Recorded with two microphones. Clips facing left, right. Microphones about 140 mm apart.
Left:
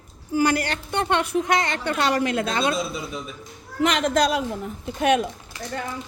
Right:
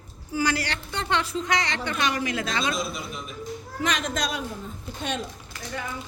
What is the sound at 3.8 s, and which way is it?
A child's voice, 65° left (ahead or behind).